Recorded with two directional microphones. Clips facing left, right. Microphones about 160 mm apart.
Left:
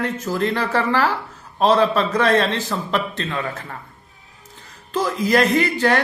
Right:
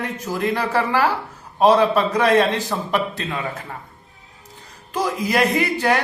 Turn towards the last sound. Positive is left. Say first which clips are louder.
# left 1 dB
turn(degrees=-15)  # may be behind; listen again after turning